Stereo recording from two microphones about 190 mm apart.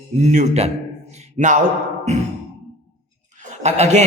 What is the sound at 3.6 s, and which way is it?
Speech, 35° right (ahead or behind).